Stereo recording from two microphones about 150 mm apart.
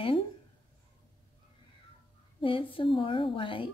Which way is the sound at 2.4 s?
35° left (ahead or behind).